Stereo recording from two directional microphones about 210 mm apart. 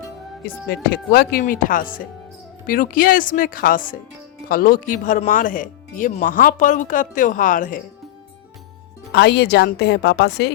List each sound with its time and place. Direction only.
0.4 s speech: 45° left (ahead or behind)
9.1 s a woman's voice: 50° left (ahead or behind)